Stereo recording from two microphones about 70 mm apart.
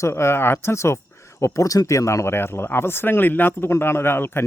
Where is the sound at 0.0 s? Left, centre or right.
Left.